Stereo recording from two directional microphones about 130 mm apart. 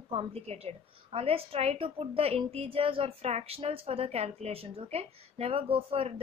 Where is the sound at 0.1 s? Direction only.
50° right (ahead or behind).